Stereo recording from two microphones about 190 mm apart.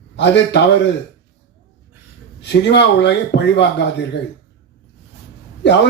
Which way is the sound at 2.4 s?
65° left (ahead or behind).